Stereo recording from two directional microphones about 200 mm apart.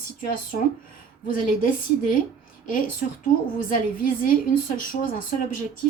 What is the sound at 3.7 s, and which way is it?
A woman's voice, 45° left (ahead or behind).